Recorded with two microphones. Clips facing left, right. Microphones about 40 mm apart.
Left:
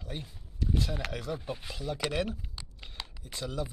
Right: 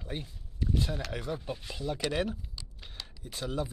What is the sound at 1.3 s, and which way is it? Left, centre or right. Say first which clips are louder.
Speech: even; centre.